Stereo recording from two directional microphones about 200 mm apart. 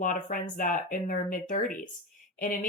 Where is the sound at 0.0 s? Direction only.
45° left (ahead or behind).